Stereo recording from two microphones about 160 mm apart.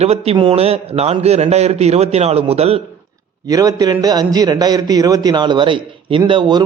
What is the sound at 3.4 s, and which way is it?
A man's voice, 20° right (ahead or behind).